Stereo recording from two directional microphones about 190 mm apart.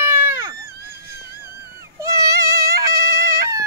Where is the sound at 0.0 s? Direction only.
10° right (ahead or behind).